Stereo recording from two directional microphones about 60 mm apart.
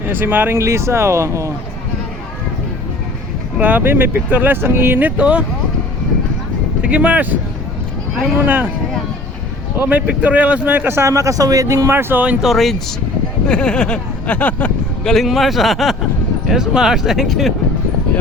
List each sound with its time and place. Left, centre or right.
0.1 s speech: right
0.5 s speech: right
3.6 s speech: right
6.8 s speech: right
8.4 s speech: right
9.7 s speech: right
10.2 s speech: right
10.8 s speech: right
11.1 s speech: right
11.9 s speech: right
12.4 s speech: centre
13.5 s a sound: centre
15.0 s speech: centre